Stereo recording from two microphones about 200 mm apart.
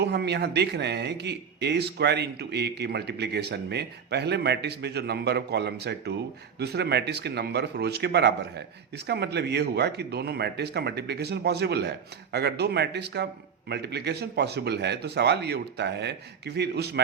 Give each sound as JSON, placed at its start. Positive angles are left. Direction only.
{"t": 0.0, "sound": "speech", "side_deg": -55}